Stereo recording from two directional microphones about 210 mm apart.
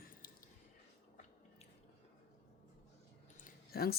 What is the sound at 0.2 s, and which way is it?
Squish, 40° left (ahead or behind).